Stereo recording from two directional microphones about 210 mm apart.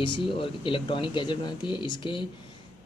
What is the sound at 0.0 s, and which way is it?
Speech, 25° left (ahead or behind).